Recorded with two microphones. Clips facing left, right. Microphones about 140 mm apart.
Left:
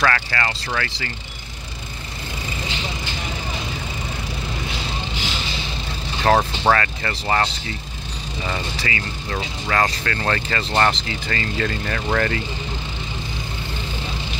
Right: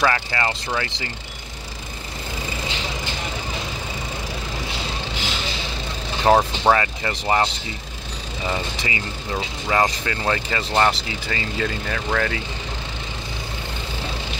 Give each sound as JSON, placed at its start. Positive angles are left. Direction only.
{"t": 0.0, "sound": "speech", "side_deg": -20}
{"t": 6.2, "sound": "speech", "side_deg": -10}
{"t": 8.5, "sound": "speech", "side_deg": -15}